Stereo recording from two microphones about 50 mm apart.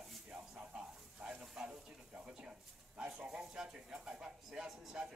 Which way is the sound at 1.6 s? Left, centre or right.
Centre.